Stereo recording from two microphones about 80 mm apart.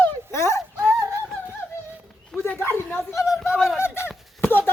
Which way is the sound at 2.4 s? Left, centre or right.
Left.